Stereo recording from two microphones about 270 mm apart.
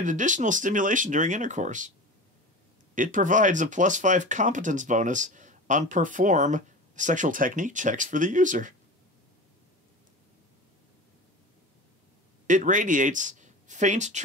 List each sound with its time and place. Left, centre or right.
0.0 s speech: right
2.9 s speech: right
12.4 s speech: right